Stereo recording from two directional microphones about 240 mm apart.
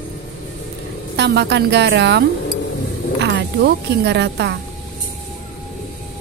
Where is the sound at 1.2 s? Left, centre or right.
Right.